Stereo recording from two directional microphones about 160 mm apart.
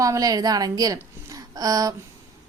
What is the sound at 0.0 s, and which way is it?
A woman's voice, 20° right (ahead or behind).